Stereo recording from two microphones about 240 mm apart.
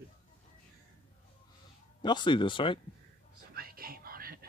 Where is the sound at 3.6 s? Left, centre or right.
Right.